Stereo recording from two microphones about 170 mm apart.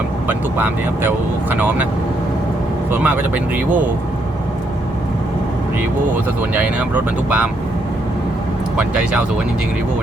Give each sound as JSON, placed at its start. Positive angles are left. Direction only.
{"t": 0.3, "sound": "speech", "side_deg": -10}
{"t": 2.9, "sound": "speech", "side_deg": -10}
{"t": 6.5, "sound": "speech", "side_deg": -10}
{"t": 8.7, "sound": "speech", "side_deg": -5}